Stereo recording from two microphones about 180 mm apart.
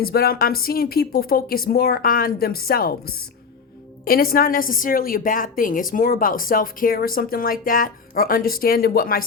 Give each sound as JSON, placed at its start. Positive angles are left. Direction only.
{"t": 0.0, "sound": "a woman's voice", "side_deg": 55}